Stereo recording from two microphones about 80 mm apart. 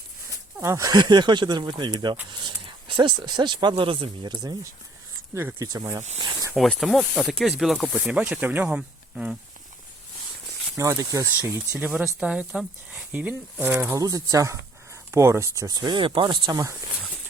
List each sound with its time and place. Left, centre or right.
0.6 s speech: right
0.9 s speech: right
2.4 s speech: right
5.3 s speech: right
5.7 s speech: right
6.6 s speech: centre
8.1 s speech: centre
10.8 s speech: right
11.8 s speech: centre
13.9 s speech: right